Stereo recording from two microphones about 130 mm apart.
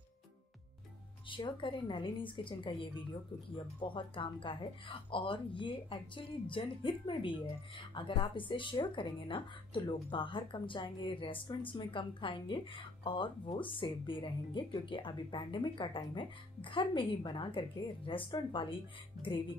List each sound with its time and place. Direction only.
1.3 s a woman's voice: 40° left (ahead or behind)